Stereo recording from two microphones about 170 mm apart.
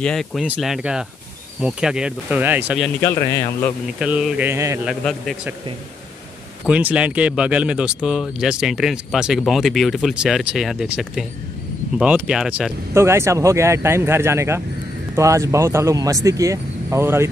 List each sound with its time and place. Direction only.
0.0 s speech: 5° left (ahead or behind)
3.0 s a man's voice: 15° left (ahead or behind)
4.0 s speech: 5° right (ahead or behind)
4.8 s speech: centre (ahead or behind)
6.6 s speech: 5° right (ahead or behind)